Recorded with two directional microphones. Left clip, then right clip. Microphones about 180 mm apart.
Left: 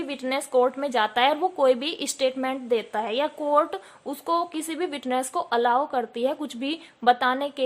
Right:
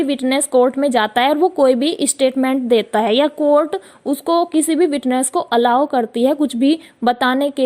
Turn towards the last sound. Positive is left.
turn(degrees=-35)  # may be behind; listen again after turning